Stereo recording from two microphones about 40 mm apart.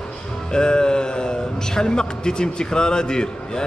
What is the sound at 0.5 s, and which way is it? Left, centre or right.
Speech, centre.